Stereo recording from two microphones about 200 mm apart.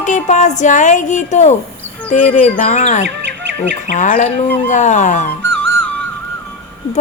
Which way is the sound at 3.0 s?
65° right (ahead or behind).